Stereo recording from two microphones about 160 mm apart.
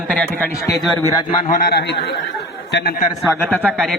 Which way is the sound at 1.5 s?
65° left (ahead or behind).